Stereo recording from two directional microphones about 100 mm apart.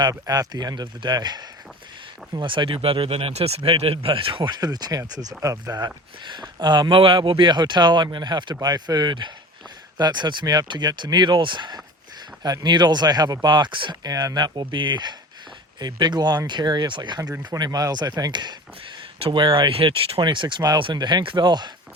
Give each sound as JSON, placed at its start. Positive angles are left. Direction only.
{"t": 0.1, "sound": "speech", "side_deg": -40}
{"t": 3.6, "sound": "speech", "side_deg": -75}
{"t": 14.1, "sound": "speech", "side_deg": -40}
{"t": 20.1, "sound": "speech", "side_deg": -50}